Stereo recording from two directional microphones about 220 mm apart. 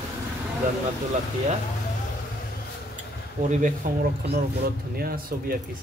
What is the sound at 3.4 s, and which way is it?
Speech, 35° right (ahead or behind).